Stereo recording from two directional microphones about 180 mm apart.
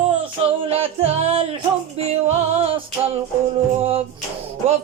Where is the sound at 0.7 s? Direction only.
35° right (ahead or behind).